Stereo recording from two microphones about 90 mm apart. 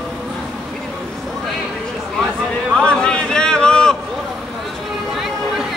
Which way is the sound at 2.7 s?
10° left (ahead or behind).